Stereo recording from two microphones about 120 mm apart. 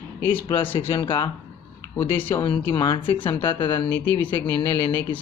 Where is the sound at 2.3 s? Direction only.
40° left (ahead or behind).